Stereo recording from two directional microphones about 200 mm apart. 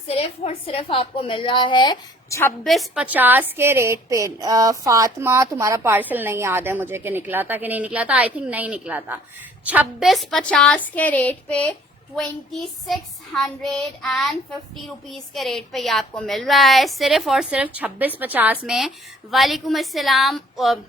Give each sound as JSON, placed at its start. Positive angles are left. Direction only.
{"t": 0.1, "sound": "a woman's voice", "side_deg": 30}
{"t": 2.6, "sound": "a woman's voice", "side_deg": 0}